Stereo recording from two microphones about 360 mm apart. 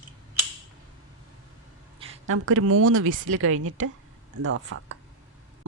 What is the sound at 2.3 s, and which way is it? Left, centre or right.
A woman's voice, right.